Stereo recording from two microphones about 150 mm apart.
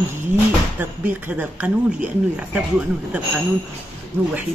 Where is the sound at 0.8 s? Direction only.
10° right (ahead or behind).